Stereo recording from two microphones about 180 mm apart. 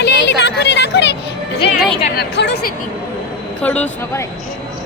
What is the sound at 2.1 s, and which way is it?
Speech, 70° left (ahead or behind).